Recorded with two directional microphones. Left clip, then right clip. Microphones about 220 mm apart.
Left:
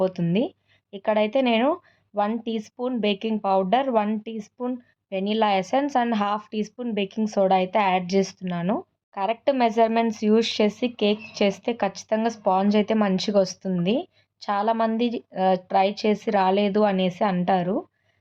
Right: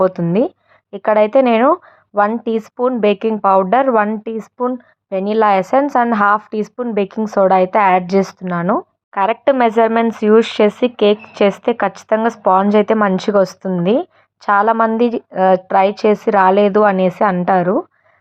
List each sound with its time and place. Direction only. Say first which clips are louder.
0.3 s a woman's voice: right 10 dB; 20° right (ahead or behind)